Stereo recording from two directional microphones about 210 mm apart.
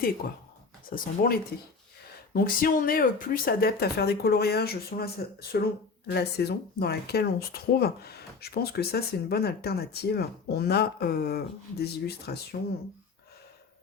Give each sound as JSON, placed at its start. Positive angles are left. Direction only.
{"t": 0.9, "sound": "speech", "side_deg": 45}